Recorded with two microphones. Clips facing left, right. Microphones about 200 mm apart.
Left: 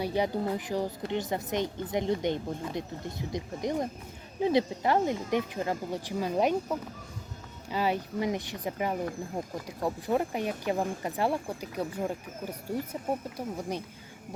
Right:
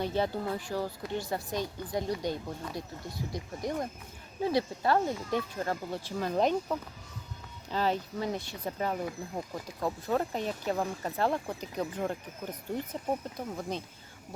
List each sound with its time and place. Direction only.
0.0 s a woman's voice: 15° left (ahead or behind)